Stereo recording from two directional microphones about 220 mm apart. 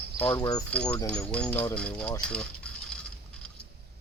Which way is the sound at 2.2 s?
5° left (ahead or behind).